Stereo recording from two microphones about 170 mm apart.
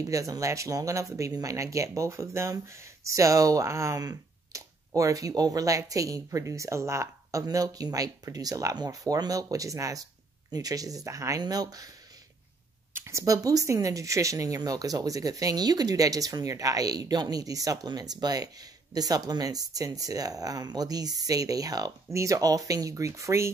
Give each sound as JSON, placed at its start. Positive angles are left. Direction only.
{"t": 0.0, "sound": "speech", "side_deg": -20}
{"t": 12.9, "sound": "speech", "side_deg": -15}